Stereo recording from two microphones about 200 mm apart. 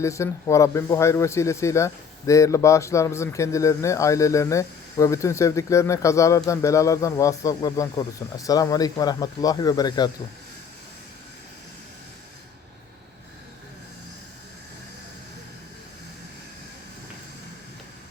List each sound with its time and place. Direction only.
0.0 s a man's voice: 15° left (ahead or behind)